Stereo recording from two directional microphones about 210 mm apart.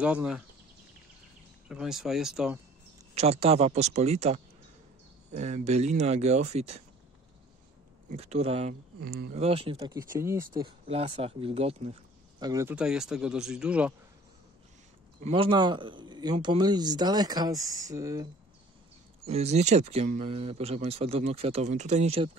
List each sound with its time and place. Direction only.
0.0 s speech: 5° right (ahead or behind)
1.7 s speech: 5° right (ahead or behind)
3.2 s speech: 30° right (ahead or behind)
8.1 s speech: 30° right (ahead or behind)
9.0 s speech: 50° right (ahead or behind)
9.3 s speech: 30° right (ahead or behind)
9.8 s speech: 15° right (ahead or behind)
15.1 s speech: 30° right (ahead or behind)
19.2 s speech: 30° right (ahead or behind)